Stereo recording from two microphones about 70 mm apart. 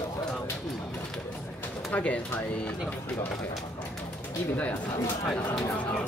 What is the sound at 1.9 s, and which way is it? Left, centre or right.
Speech, centre.